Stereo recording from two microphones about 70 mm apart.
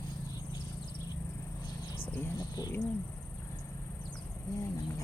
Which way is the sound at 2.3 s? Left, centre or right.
Left.